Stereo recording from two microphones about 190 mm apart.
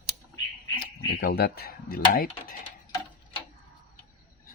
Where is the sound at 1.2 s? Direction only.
55° left (ahead or behind).